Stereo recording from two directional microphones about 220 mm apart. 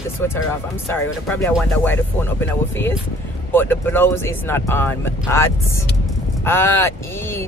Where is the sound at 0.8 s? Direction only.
10° left (ahead or behind).